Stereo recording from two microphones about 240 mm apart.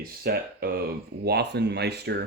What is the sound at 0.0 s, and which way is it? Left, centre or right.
Speech, right.